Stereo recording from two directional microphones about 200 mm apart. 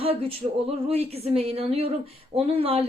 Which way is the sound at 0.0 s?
30° right (ahead or behind).